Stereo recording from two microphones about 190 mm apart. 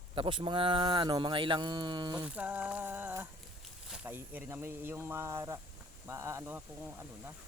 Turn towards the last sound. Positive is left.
turn(degrees=-15)  # may be behind; listen again after turning